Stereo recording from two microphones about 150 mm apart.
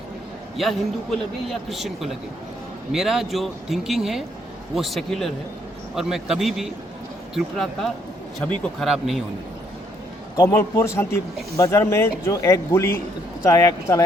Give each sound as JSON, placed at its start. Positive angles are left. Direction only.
{"t": 0.5, "sound": "a man's voice", "side_deg": 0}
{"t": 10.3, "sound": "speech", "side_deg": 20}